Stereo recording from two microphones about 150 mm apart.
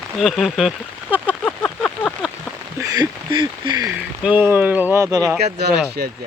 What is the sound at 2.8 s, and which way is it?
Speech, 25° right (ahead or behind).